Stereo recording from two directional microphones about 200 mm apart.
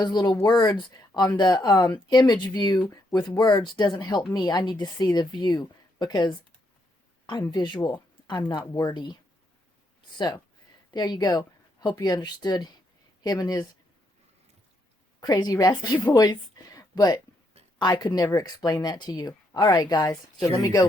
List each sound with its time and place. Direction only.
0.0 s speech: 20° left (ahead or behind)
7.5 s speech: 20° left (ahead or behind)
10.2 s speech: 20° left (ahead or behind)
15.2 s a woman's voice: 20° left (ahead or behind)